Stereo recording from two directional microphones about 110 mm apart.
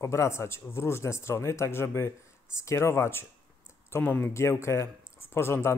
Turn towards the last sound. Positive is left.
turn(degrees=20)  # may be behind; listen again after turning